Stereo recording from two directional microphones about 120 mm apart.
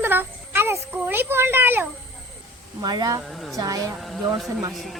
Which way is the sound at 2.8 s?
35° right (ahead or behind).